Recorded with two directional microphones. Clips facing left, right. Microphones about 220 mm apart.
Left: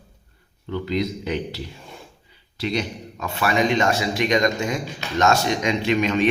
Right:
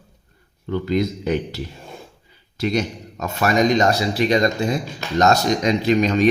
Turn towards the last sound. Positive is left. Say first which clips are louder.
# right 3 dB
turn(degrees=-35)  # may be behind; listen again after turning